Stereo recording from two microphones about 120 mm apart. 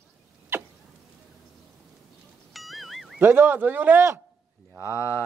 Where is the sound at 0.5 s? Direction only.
20° right (ahead or behind).